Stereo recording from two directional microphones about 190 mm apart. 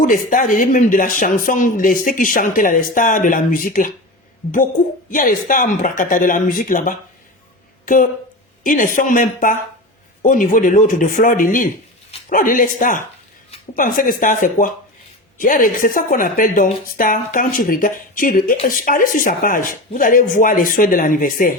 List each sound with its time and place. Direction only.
0.0 s speech: 45° left (ahead or behind)
5.1 s speech: 45° left (ahead or behind)
8.6 s speech: 45° left (ahead or behind)